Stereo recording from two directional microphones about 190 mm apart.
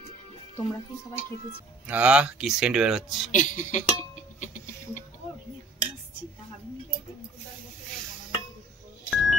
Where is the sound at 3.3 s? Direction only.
40° left (ahead or behind).